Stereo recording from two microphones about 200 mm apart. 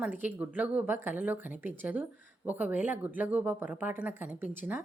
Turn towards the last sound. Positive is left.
turn(degrees=-10)  # may be behind; listen again after turning